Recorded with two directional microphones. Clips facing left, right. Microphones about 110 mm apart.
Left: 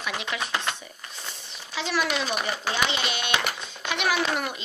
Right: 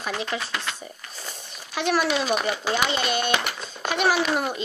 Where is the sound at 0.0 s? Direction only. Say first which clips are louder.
Right 3 dB; 40° right (ahead or behind).